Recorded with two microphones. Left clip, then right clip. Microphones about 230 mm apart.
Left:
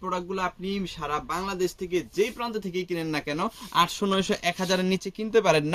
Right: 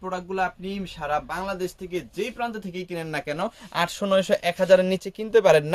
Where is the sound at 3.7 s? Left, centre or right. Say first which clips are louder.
Right 1 dB; right.